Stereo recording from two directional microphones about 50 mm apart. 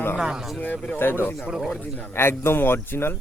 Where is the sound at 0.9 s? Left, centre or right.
Left.